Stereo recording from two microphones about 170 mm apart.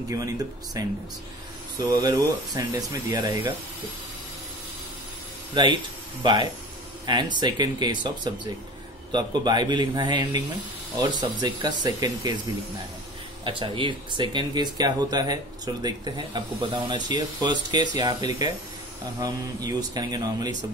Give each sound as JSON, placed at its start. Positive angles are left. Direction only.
{"t": 0.8, "sound": "speech", "side_deg": -20}
{"t": 5.5, "sound": "speech", "side_deg": -30}
{"t": 13.4, "sound": "speech", "side_deg": -30}